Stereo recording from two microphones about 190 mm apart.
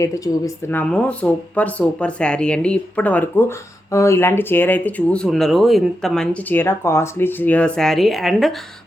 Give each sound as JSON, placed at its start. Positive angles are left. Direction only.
{"t": 0.0, "sound": "speech", "side_deg": 15}